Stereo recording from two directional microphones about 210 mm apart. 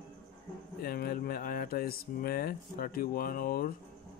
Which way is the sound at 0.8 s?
45° left (ahead or behind).